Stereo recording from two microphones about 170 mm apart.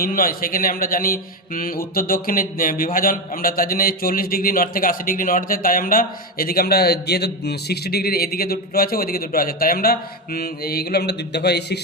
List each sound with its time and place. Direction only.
0.0 s a man's voice: 55° left (ahead or behind); by 11.8 s 75° left (ahead or behind)